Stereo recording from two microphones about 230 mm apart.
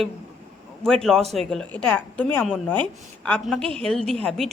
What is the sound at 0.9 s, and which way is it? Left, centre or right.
Speech, centre.